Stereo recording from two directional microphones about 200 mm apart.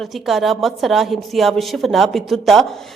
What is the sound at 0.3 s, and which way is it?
Speech, centre (ahead or behind).